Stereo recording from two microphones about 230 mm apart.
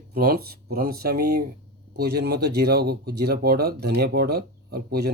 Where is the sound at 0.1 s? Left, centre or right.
Right.